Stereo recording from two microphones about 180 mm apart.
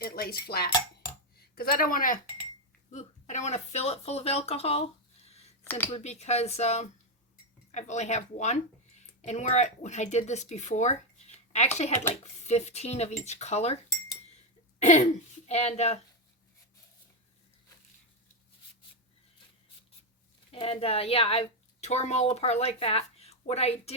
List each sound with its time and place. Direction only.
0.0 s speech: 55° left (ahead or behind); by 4.8 s 35° left (ahead or behind)
5.2 s a sound: 35° left (ahead or behind)
5.6 s speech: 10° left (ahead or behind)
5.9 s speech: 35° left (ahead or behind)
12.2 s speech: 40° left (ahead or behind)
14.8 s speech: 40° left (ahead or behind)
20.5 s speech: 30° left (ahead or behind)